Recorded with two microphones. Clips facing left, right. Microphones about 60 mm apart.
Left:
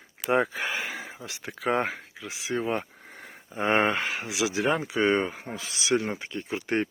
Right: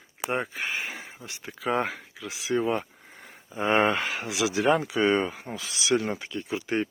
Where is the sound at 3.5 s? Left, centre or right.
Left.